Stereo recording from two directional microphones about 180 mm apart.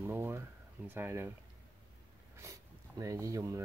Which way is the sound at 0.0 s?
10° right (ahead or behind).